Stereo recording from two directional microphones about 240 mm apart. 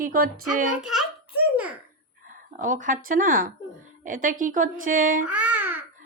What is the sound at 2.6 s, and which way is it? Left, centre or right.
Speech, right.